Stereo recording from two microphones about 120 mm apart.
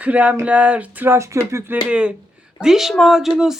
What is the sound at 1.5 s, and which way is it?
Speech, 20° right (ahead or behind).